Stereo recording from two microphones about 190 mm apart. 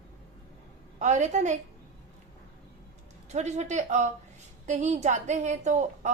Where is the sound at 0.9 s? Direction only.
40° right (ahead or behind).